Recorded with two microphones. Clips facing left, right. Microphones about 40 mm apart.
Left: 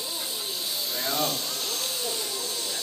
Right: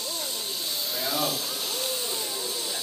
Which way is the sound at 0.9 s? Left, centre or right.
Centre.